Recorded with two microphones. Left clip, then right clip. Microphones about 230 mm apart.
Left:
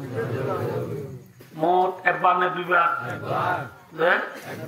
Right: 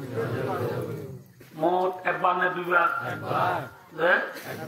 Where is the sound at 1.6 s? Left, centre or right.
Left.